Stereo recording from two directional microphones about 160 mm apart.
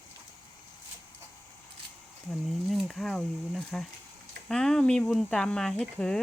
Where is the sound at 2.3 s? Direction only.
Centre (ahead or behind).